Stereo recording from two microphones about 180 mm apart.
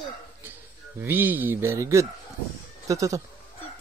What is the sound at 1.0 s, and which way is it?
Speech, 10° right (ahead or behind).